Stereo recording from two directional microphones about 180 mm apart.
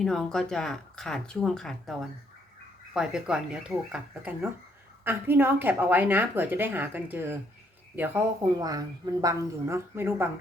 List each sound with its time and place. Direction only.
0.0 s a woman's voice: centre (ahead or behind); by 10.2 s 15° right (ahead or behind)